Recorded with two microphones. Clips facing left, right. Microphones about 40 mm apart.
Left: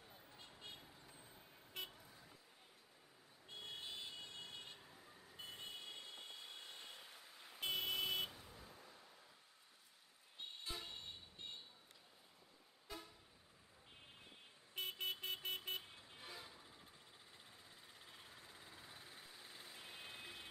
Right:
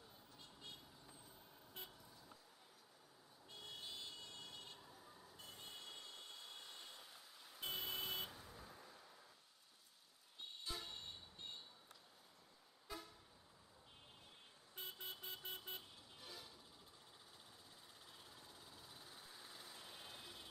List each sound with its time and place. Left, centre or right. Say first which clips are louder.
0.4 s a sound: left 1 dB; left
1.8 s vehicle: left 7 dB; left
3.4 s vehicle: left 3 dB; left
5.5 s a sound: left 4 dB; left
5.8 s vehicle: left 2 dB; left
7.6 s vehicle: left 5 dB; left
8.3 s vehicle: right 1 dB; centre
8.6 s a sound: right 1 dB; centre
10.7 s vehicle: right 1 dB; centre
12.8 s vehicle: right 1 dB; centre
14.8 s vehicle: left 8 dB; left
15.4 s vehicle: left 6 dB; left
15.8 s vehicle: left 2 dB; left
18.0 s vehicle: left 2 dB; left